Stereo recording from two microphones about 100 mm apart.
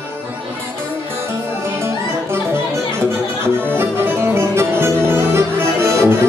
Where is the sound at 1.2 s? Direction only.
25° right (ahead or behind).